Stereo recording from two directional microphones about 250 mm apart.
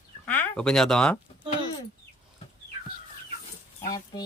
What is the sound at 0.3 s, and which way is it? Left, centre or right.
Speech, centre.